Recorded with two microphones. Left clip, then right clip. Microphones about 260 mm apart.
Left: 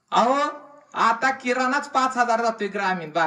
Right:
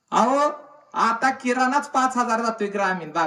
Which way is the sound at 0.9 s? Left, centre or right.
Centre.